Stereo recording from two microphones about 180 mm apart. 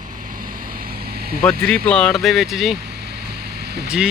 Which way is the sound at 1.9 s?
5° left (ahead or behind).